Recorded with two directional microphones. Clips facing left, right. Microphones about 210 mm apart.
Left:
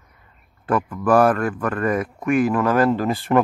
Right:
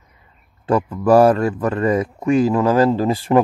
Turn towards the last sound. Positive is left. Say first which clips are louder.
# right 3 dB
turn(degrees=-20)  # may be behind; listen again after turning